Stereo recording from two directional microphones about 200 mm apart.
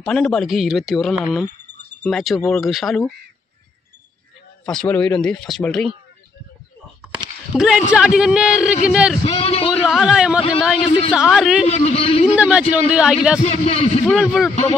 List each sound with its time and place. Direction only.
0.0 s speech: 5° left (ahead or behind)
4.6 s speech: 5° left (ahead or behind)
7.5 s speech: 5° right (ahead or behind)
9.2 s a man's voice: 30° left (ahead or behind)
9.8 s speech: centre (ahead or behind)
10.9 s a man's voice: 25° left (ahead or behind)
11.1 s speech: 5° right (ahead or behind)
11.6 s a man's voice: 30° left (ahead or behind)
12.4 s speech: 5° right (ahead or behind)
13.4 s a man's voice: 30° left (ahead or behind)
14.1 s speech: centre (ahead or behind)
14.5 s a man's voice: 35° left (ahead or behind)